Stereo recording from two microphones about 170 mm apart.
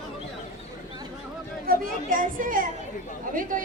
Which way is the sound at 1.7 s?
55° right (ahead or behind).